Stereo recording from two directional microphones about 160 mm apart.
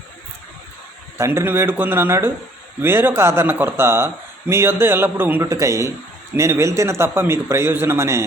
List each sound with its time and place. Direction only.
1.2 s speech: 15° right (ahead or behind)